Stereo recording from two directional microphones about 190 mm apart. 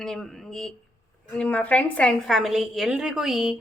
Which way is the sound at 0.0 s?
Centre (ahead or behind).